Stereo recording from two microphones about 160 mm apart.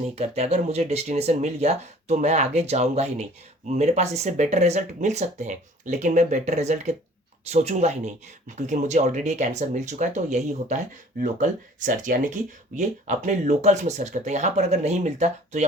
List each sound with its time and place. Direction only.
0.2 s speech: 40° right (ahead or behind)